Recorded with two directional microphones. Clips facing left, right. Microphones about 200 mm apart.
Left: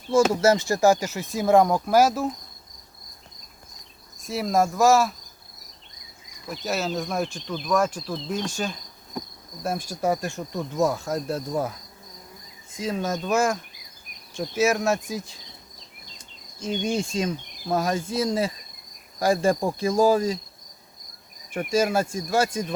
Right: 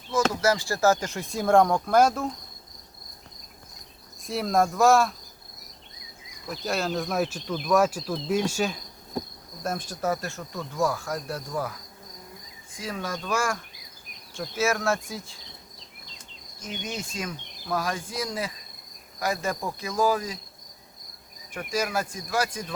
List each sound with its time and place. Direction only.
0.1 s speech: 25° left (ahead or behind); by 2.3 s 5° left (ahead or behind)
4.3 s speech: centre (ahead or behind)
6.5 s speech: centre (ahead or behind)
9.6 s speech: 10° left (ahead or behind)
12.8 s speech: 20° left (ahead or behind)
16.6 s speech: 30° left (ahead or behind)
21.7 s speech: 25° left (ahead or behind)